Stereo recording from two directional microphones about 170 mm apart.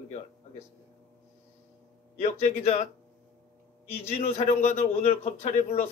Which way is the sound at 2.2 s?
40° left (ahead or behind).